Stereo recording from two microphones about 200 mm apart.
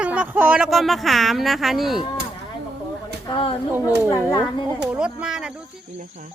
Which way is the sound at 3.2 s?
25° left (ahead or behind).